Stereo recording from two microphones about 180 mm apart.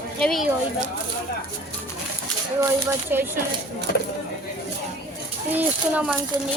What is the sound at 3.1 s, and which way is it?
Speech, 10° right (ahead or behind).